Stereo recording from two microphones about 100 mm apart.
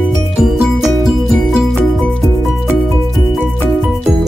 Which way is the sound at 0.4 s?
Centre (ahead or behind).